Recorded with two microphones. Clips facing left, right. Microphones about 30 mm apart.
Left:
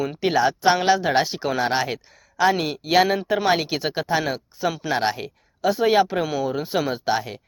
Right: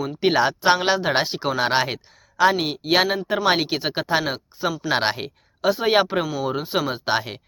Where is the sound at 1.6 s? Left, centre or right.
Right.